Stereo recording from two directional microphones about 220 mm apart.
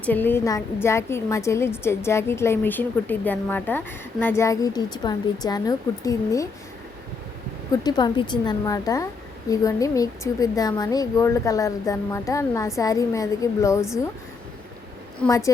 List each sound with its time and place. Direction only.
0.0 s a woman's voice: 10° left (ahead or behind)
7.7 s a woman's voice: 20° left (ahead or behind)
15.3 s a woman's voice: 15° left (ahead or behind)